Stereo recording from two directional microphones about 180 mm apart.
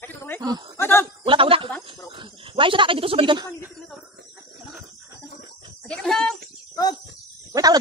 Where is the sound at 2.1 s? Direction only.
25° right (ahead or behind).